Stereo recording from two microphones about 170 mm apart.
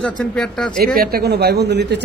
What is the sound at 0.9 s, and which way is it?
Speech, 60° right (ahead or behind).